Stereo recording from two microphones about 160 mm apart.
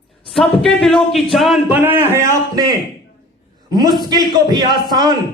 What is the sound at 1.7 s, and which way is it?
Speech, 15° right (ahead or behind).